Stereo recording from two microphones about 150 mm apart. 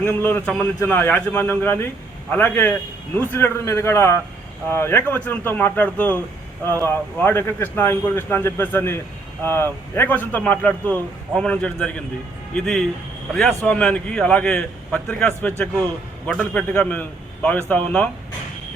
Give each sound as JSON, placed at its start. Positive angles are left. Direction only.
{"t": 0.0, "sound": "a man's voice", "side_deg": 15}